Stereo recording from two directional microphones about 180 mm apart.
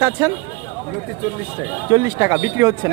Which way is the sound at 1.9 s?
15° right (ahead or behind).